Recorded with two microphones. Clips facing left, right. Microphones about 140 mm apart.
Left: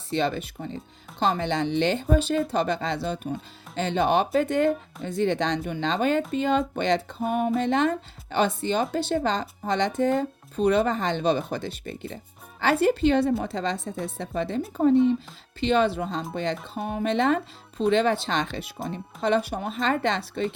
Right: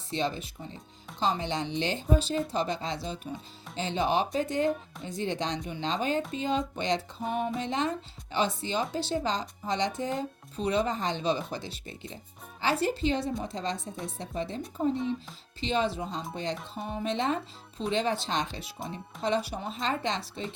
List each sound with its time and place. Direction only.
0.1 s speech: 60° left (ahead or behind)
15.6 s speech: 60° left (ahead or behind)